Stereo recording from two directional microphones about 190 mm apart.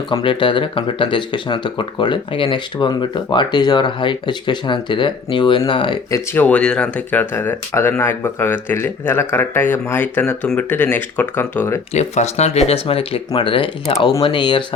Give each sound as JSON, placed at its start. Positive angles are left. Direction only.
{"t": 0.1, "sound": "speech", "side_deg": 25}
{"t": 6.3, "sound": "speech", "side_deg": 10}
{"t": 11.9, "sound": "speech", "side_deg": 35}